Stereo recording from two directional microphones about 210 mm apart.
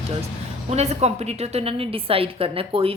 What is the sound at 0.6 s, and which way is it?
A woman's voice, 30° right (ahead or behind).